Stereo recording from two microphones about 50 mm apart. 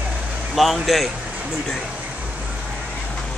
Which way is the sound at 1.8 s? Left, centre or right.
Centre.